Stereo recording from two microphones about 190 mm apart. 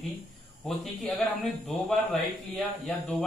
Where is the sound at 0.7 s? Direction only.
Centre (ahead or behind).